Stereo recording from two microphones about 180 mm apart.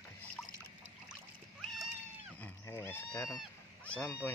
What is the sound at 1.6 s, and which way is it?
Cat, centre (ahead or behind).